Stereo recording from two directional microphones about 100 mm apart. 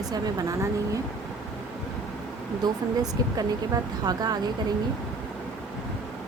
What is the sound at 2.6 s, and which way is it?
Speech, 45° right (ahead or behind).